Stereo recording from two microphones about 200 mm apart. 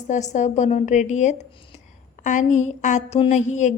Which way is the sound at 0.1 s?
35° left (ahead or behind).